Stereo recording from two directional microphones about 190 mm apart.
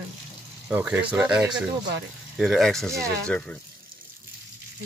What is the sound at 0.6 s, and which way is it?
Speech, 5° right (ahead or behind).